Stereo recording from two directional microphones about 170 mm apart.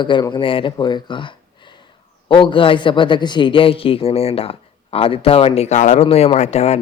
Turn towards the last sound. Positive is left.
turn(degrees=40)  # may be behind; listen again after turning